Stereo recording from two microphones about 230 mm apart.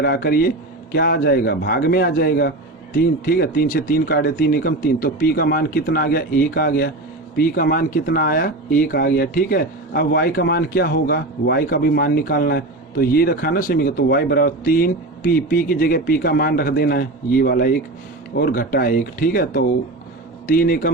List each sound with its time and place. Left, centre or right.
0.0 s speech: left